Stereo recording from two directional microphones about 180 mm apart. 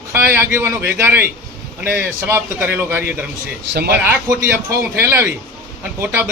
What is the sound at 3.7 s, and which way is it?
Speech, 65° right (ahead or behind).